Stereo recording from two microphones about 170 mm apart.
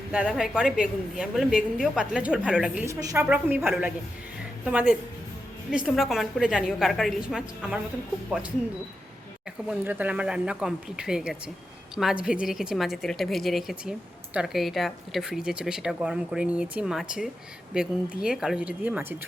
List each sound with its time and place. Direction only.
0.3 s speech: centre (ahead or behind)
2.8 s a woman's voice: 20° right (ahead or behind); by 7.8 s 5° right (ahead or behind)
9.6 s speech: 10° right (ahead or behind)